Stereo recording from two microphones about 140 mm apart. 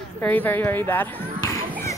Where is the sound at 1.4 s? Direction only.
25° left (ahead or behind).